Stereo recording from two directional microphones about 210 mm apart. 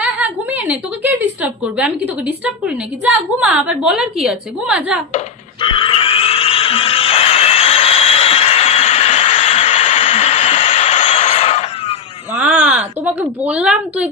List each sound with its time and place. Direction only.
0.0 s a woman's voice: 5° right (ahead or behind)
5.1 s a sound: 25° left (ahead or behind)
12.3 s speech: 5° right (ahead or behind)